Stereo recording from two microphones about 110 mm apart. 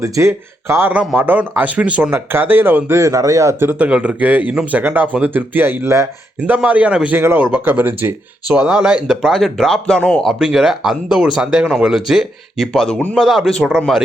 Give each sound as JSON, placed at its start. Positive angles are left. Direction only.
{"t": 0.0, "sound": "speech", "side_deg": -25}
{"t": 10.3, "sound": "speech", "side_deg": -5}